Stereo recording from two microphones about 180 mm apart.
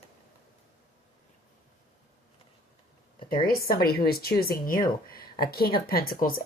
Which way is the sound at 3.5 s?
55° left (ahead or behind).